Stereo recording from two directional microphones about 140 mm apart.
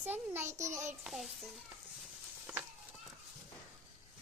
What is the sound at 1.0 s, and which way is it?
Speech, centre (ahead or behind).